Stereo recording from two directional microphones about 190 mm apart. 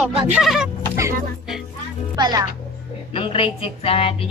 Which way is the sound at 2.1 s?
20° right (ahead or behind).